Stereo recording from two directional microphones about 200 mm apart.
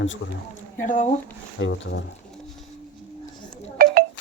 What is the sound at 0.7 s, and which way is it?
Speech, 40° left (ahead or behind).